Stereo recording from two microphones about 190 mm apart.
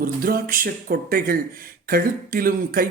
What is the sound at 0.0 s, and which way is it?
Speech, 50° right (ahead or behind).